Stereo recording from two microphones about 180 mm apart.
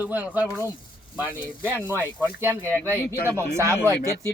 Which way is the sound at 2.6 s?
10° left (ahead or behind).